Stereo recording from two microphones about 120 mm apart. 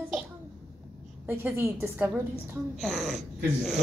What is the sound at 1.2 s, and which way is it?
Speech, 20° right (ahead or behind).